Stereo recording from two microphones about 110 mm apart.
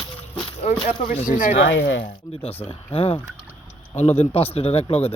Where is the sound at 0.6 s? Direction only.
85° left.